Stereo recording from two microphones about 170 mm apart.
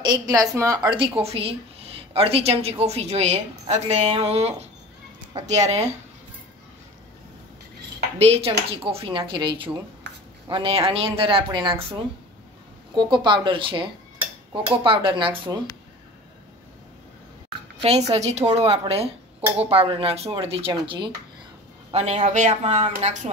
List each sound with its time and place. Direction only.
0.0 s speech: 25° right (ahead or behind); by 5.9 s 40° right (ahead or behind)
8.2 s speech: 35° right (ahead or behind)
12.9 s speech: 30° right (ahead or behind)
18.1 s speech: 40° right (ahead or behind)
21.9 s speech: 40° right (ahead or behind)